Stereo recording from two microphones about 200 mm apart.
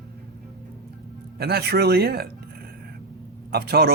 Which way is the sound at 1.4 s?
50° right (ahead or behind).